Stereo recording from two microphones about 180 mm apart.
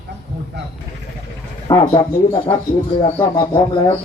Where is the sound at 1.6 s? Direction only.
25° left (ahead or behind).